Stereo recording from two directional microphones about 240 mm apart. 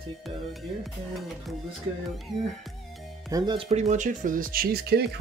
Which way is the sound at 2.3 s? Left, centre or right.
Centre.